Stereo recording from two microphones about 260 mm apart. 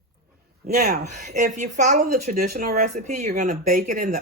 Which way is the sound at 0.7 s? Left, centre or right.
Right.